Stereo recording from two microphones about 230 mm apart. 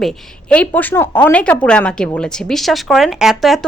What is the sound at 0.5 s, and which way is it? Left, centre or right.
A woman's voice, centre.